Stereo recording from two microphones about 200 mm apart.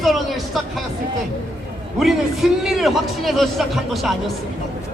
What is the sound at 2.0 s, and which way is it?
A man's voice, centre (ahead or behind).